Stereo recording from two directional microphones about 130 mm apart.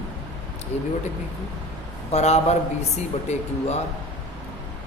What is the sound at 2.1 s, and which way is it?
Mantra, 55° left (ahead or behind).